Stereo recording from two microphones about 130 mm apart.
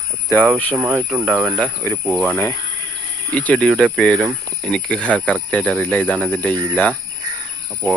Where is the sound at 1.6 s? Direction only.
15° left (ahead or behind).